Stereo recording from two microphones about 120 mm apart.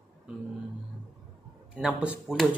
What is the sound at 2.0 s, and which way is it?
Speech, 10° right (ahead or behind).